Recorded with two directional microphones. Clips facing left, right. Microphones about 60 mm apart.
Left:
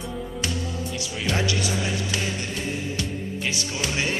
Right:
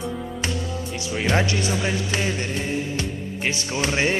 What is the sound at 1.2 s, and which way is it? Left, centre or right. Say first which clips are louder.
Music: right 4 dB; right.